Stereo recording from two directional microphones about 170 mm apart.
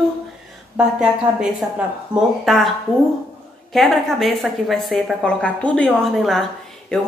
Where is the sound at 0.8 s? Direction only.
5° right (ahead or behind).